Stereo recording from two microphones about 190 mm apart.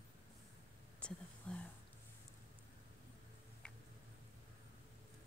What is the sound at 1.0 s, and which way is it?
Speech, 5° left (ahead or behind).